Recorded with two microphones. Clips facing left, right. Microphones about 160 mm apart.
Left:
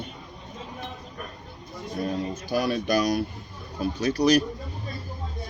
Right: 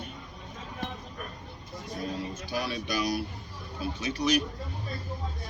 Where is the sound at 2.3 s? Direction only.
45° left (ahead or behind).